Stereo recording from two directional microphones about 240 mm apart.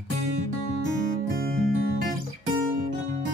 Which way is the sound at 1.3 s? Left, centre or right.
Right.